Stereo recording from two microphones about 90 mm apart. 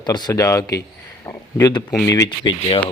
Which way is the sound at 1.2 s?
30° left (ahead or behind).